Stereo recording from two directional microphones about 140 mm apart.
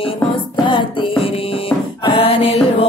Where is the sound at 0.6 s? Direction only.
35° left (ahead or behind).